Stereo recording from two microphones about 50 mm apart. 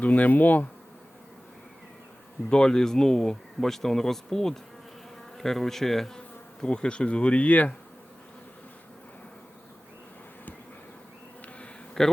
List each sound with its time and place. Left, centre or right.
0.0 s speech: left
2.5 s speech: centre
5.4 s bee: centre; by 7.8 s left
12.0 s speech: centre